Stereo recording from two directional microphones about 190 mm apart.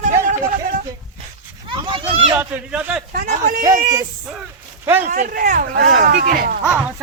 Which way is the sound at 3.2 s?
45° right (ahead or behind).